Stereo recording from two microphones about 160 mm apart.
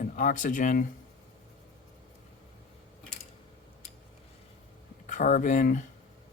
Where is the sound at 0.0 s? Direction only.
55° left (ahead or behind).